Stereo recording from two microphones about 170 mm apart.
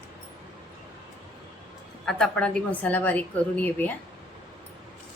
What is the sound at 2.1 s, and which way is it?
A woman's voice, 5° left (ahead or behind).